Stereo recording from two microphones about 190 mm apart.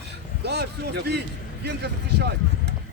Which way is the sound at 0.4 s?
60° right (ahead or behind).